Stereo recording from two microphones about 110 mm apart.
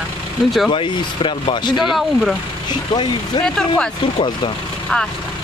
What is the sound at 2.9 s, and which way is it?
Speech, 45° left (ahead or behind).